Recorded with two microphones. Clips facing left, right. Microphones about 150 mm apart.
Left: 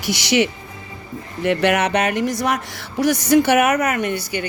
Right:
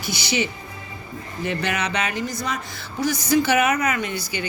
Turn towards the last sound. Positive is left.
turn(degrees=60)  # may be behind; listen again after turning